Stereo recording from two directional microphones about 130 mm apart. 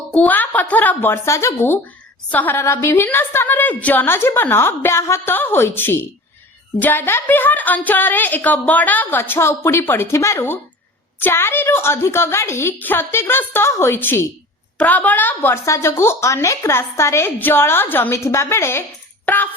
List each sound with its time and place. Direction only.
0.1 s a woman's voice: 10° left (ahead or behind)